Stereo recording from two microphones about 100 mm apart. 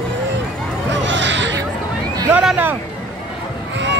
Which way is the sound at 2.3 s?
10° right (ahead or behind).